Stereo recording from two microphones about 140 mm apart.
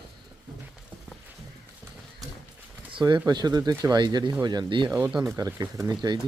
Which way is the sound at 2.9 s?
35° right (ahead or behind).